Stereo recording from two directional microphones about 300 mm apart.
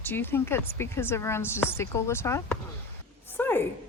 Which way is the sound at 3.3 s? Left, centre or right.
Centre.